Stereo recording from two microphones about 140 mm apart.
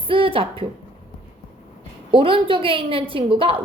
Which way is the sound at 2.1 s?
40° right (ahead or behind).